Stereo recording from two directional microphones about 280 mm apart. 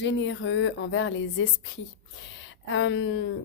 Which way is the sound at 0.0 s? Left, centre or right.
Left.